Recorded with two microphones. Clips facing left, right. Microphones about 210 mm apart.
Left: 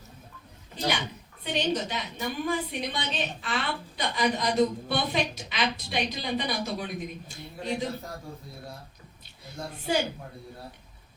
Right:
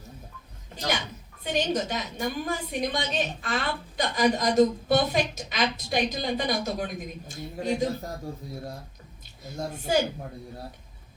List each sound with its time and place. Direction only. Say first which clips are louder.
1.5 s a woman's voice: right 2 dB; 45° right (ahead or behind)
9.6 s a woman's voice: right 3 dB; 45° right (ahead or behind)